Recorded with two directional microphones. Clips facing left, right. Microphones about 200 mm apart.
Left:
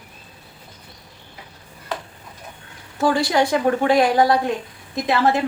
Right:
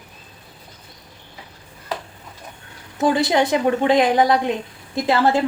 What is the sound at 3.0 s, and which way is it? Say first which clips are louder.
A woman's voice: right 1 dB; 20° right (ahead or behind).